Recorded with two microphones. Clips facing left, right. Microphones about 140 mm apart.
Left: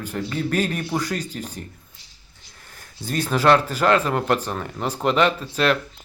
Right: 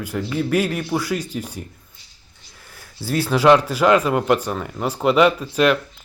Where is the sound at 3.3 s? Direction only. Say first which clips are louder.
Right 3 dB; 10° right (ahead or behind).